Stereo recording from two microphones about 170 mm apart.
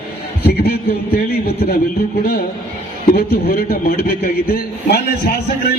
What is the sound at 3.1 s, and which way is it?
A man's voice, 60° left (ahead or behind).